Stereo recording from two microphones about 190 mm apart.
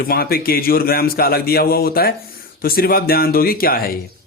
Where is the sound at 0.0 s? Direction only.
50° left (ahead or behind).